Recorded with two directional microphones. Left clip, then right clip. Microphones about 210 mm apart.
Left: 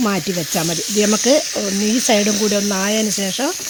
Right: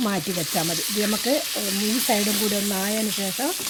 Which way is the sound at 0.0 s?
40° left (ahead or behind).